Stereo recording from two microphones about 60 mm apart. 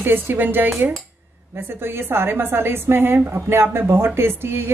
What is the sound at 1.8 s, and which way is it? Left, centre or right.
A woman's voice, right.